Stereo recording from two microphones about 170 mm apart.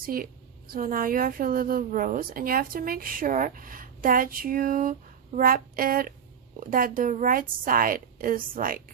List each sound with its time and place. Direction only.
0.0 s a woman's voice: 60° right (ahead or behind)